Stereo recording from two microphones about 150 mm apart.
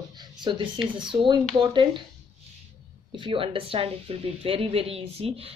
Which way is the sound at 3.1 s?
35° right (ahead or behind).